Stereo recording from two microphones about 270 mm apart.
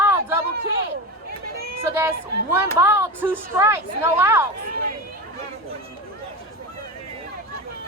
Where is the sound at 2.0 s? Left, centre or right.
Centre.